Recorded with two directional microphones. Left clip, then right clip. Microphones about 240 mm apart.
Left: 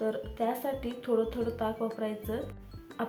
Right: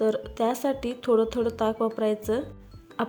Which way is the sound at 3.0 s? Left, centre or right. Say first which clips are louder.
Right 6 dB; right.